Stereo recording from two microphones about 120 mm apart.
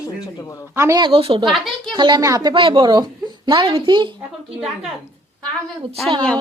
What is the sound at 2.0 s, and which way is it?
Speech, 40° right (ahead or behind).